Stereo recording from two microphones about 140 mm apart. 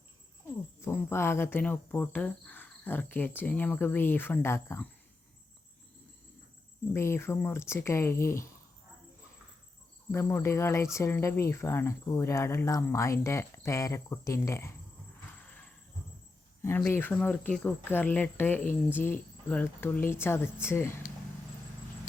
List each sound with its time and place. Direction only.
0.8 s speech: 20° left (ahead or behind)
6.9 s speech: 20° left (ahead or behind)
10.1 s speech: 20° left (ahead or behind)
15.4 s a sound: 15° left (ahead or behind)
16.6 s speech: 15° left (ahead or behind)